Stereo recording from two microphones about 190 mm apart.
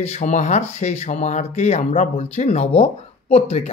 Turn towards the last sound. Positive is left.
turn(degrees=30)  # may be behind; listen again after turning